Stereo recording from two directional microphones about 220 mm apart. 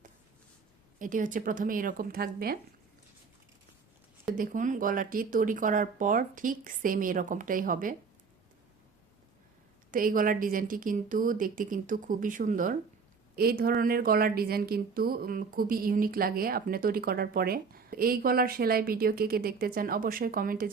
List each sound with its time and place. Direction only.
0.9 s a woman's voice: 35° right (ahead or behind)
4.4 s a woman's voice: 35° right (ahead or behind)
9.9 s a woman's voice: 40° right (ahead or behind)